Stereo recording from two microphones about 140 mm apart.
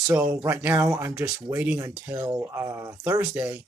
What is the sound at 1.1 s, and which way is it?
Speech, 10° right (ahead or behind).